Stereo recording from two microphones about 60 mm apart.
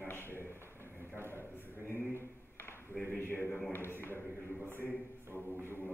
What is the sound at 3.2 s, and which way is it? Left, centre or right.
Speech, left.